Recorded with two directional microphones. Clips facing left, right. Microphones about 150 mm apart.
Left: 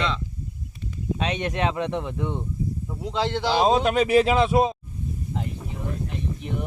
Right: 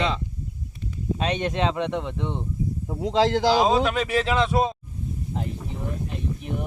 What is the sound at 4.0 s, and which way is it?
Speech, 10° left (ahead or behind).